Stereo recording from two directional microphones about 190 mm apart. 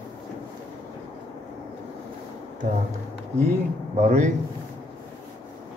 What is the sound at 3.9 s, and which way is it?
Speech, 35° right (ahead or behind).